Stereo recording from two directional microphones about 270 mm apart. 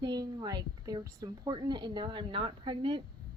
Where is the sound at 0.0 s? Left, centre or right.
Centre.